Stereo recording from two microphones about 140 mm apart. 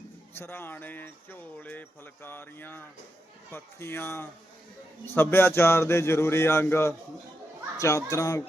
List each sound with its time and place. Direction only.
0.3 s speech: 15° left (ahead or behind)